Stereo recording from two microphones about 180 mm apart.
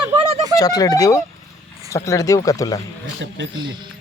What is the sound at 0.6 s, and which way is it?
Speech, 20° left (ahead or behind).